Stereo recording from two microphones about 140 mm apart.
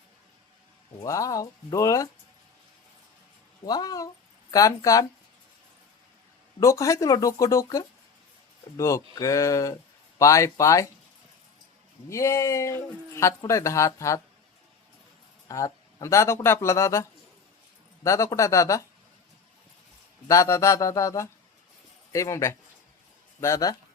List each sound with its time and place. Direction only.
1.0 s speech: 25° left (ahead or behind)
3.7 s speech: 25° left (ahead or behind)
6.6 s speech: 20° left (ahead or behind)
12.0 s speech: 20° left (ahead or behind)
15.4 s speech: 25° left (ahead or behind)
20.2 s speech: 20° left (ahead or behind)